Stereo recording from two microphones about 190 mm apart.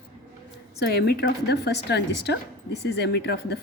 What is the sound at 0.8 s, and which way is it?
A woman's voice, 60° left (ahead or behind).